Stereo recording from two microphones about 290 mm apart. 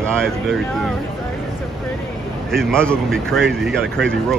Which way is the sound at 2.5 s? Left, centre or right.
Centre.